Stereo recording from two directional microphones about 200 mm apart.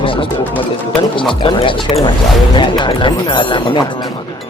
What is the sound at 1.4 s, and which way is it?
Speech, 25° left (ahead or behind).